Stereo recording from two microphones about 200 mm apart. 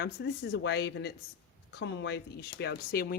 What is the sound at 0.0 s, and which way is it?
Speech, 50° left (ahead or behind).